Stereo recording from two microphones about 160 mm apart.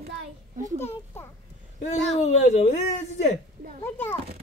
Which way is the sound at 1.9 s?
45° left (ahead or behind).